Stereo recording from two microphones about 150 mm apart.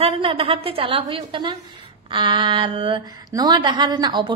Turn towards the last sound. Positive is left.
turn(degrees=-30)  # may be behind; listen again after turning